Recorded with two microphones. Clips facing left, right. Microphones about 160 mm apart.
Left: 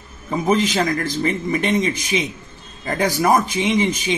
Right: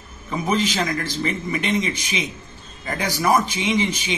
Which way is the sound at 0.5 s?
45° left (ahead or behind).